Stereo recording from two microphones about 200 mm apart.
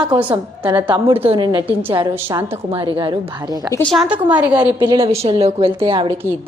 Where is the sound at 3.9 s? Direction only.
5° right (ahead or behind).